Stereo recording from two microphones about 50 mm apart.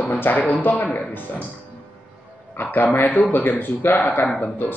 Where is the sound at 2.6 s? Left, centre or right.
Left.